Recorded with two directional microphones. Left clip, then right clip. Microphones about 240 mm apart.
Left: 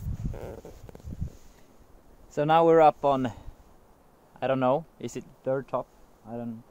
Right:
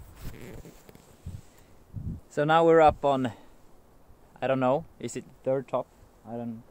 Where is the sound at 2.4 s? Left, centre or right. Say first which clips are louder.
Even; centre.